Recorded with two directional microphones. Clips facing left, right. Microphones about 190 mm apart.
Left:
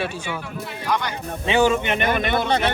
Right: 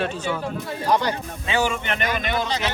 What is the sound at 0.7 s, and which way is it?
Speech, 35° right (ahead or behind).